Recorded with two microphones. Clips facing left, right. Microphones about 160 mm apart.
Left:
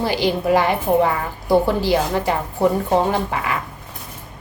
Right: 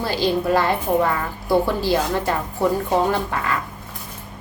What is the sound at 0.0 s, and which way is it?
A woman's voice, 15° left (ahead or behind).